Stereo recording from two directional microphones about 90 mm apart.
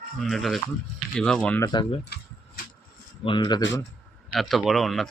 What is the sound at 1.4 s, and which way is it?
Speech, 20° left (ahead or behind).